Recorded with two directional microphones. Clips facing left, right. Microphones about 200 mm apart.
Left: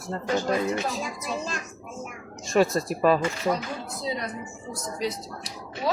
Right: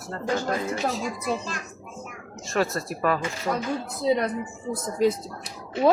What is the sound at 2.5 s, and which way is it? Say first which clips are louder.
Speech: left 4 dB; 15° left (ahead or behind).